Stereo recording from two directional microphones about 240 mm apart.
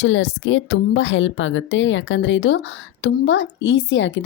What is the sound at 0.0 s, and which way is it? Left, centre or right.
A woman's voice, left.